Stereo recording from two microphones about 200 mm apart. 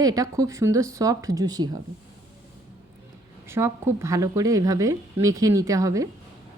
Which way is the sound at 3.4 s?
10° right (ahead or behind).